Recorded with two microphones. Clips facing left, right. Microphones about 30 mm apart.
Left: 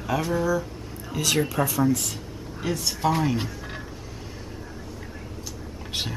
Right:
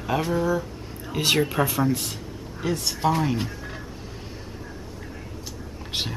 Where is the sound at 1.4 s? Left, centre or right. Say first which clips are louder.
Right 1 dB; right.